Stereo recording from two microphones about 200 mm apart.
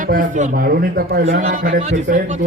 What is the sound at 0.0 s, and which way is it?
A man's voice, 40° right (ahead or behind).